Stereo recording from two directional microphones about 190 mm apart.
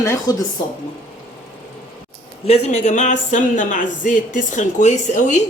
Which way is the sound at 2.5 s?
35° left (ahead or behind).